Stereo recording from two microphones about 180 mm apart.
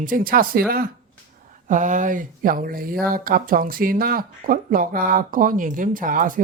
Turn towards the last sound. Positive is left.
turn(degrees=-50)  # may be behind; listen again after turning